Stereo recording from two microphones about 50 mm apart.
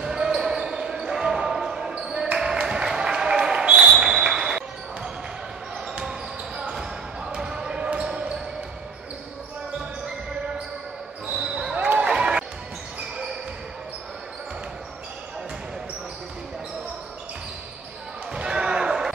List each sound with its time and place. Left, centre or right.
0.0 s basketball bounce: centre
2.3 s a sound: centre
4.3 s basketball bounce: centre
11.3 s basketball bounce: centre
11.8 s basketball bounce: right
12.1 s basketball bounce: centre
18.3 s basketball bounce: centre